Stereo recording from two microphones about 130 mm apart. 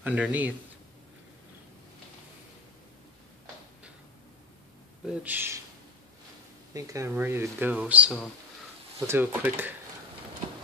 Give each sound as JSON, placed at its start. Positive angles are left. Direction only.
{"t": 0.0, "sound": "speech", "side_deg": -10}
{"t": 5.0, "sound": "speech", "side_deg": -15}
{"t": 6.7, "sound": "speech", "side_deg": -25}